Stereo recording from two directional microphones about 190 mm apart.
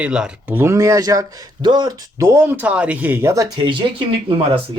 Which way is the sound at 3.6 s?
25° right (ahead or behind).